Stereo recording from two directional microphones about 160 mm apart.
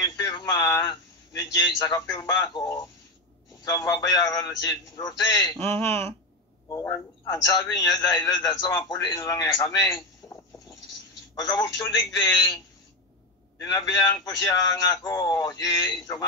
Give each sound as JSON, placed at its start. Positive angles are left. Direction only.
{"t": 0.0, "sound": "radio", "side_deg": 20}
{"t": 0.8, "sound": "a man's voice", "side_deg": 25}
{"t": 13.6, "sound": "a man's voice", "side_deg": 25}